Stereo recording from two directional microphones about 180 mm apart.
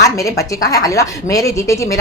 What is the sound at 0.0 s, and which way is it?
A woman's voice, 20° left (ahead or behind).